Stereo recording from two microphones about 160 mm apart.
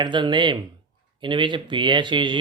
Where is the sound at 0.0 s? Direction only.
30° right (ahead or behind).